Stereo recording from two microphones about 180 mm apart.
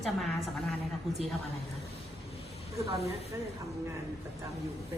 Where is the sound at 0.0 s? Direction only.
Centre (ahead or behind).